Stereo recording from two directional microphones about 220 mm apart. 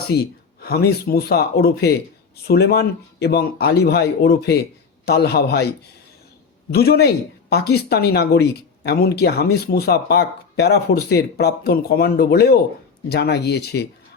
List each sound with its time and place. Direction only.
0.1 s speech: 45° left (ahead or behind)
6.7 s speech: 45° left (ahead or behind)